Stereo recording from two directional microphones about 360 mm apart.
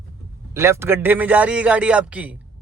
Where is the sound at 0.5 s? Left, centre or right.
Centre.